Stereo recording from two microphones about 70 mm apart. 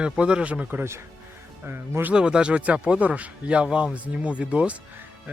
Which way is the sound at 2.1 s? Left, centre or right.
Centre.